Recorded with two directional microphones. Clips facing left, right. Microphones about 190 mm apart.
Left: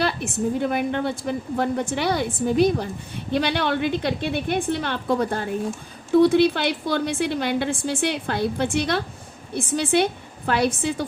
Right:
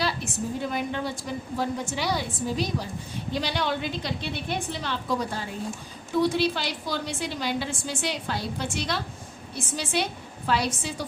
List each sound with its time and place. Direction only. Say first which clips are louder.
0.0 s a woman's voice: left 5 dB; 60° left (ahead or behind)